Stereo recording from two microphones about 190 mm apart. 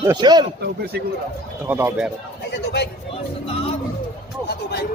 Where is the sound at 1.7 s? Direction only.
10° right (ahead or behind).